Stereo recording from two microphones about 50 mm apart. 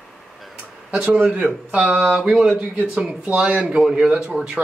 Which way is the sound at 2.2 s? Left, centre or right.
Centre.